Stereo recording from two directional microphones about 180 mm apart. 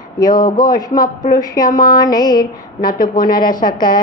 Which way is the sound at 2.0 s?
20° left (ahead or behind).